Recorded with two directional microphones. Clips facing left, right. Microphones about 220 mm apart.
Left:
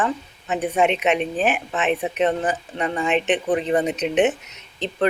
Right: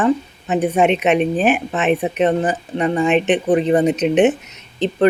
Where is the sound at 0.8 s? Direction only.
50° right (ahead or behind).